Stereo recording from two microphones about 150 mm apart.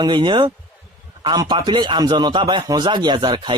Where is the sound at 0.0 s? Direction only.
30° right (ahead or behind).